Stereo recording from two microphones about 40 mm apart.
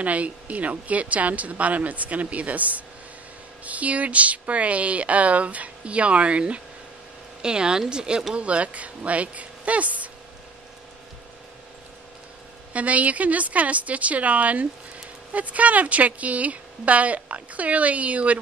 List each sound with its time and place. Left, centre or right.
0.0 s speech: right
7.4 s speech: centre
8.4 s speech: right
12.7 s speech: right